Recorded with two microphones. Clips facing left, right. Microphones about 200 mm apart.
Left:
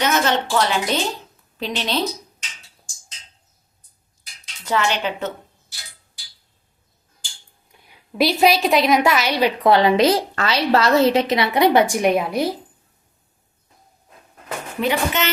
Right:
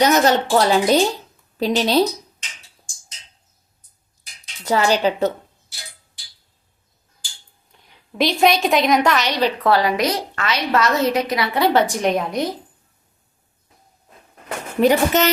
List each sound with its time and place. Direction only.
0.0 s speech: 40° right (ahead or behind)
4.6 s speech: 35° right (ahead or behind)
7.7 s a woman's voice: 10° left (ahead or behind)
14.8 s speech: 40° right (ahead or behind)